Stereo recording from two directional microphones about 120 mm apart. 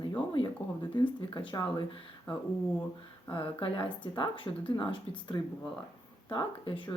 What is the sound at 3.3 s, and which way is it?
Speech, 50° left (ahead or behind).